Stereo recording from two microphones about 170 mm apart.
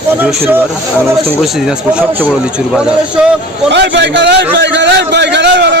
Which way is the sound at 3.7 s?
90° right.